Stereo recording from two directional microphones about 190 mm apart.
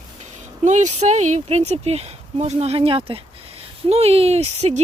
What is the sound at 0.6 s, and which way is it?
Speech, 40° right (ahead or behind).